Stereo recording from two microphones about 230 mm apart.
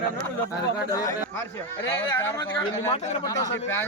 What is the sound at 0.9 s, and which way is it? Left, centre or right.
A man's voice, centre.